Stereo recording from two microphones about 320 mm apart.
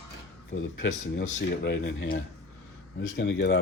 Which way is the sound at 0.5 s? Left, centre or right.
Left.